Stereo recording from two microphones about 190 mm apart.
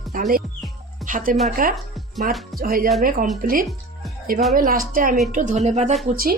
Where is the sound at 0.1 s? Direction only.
45° right (ahead or behind).